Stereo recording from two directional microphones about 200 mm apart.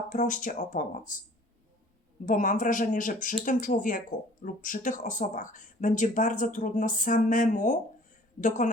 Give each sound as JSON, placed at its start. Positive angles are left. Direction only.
{"t": 0.1, "sound": "speech", "side_deg": 40}
{"t": 2.2, "sound": "speech", "side_deg": 40}